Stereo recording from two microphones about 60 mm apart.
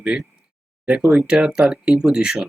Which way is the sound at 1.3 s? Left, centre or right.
Centre.